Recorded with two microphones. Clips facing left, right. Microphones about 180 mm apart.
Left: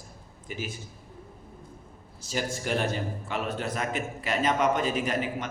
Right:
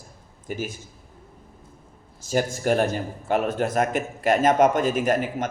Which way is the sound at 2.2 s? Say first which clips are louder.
Right 8 dB; 50° right (ahead or behind).